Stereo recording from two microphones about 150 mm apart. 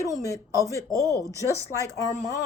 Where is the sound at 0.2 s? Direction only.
20° left (ahead or behind).